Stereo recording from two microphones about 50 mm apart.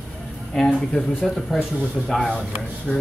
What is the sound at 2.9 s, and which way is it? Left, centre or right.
Speech, centre.